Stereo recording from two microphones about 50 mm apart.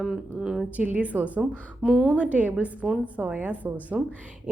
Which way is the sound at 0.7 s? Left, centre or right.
Right.